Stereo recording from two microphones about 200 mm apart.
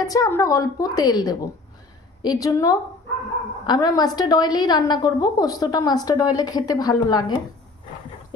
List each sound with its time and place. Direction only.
0.0 s a woman's voice: 20° left (ahead or behind)